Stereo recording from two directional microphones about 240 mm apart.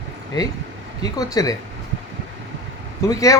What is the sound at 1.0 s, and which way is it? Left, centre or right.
Speech, centre.